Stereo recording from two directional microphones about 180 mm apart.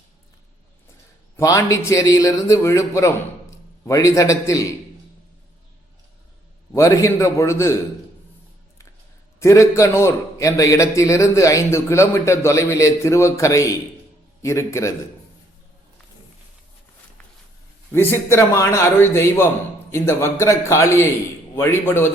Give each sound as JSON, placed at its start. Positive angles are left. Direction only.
{"t": 1.4, "sound": "a man's voice", "side_deg": 20}
{"t": 6.7, "sound": "a man's voice", "side_deg": 15}
{"t": 9.4, "sound": "a man's voice", "side_deg": 15}
{"t": 17.9, "sound": "a man's voice", "side_deg": 15}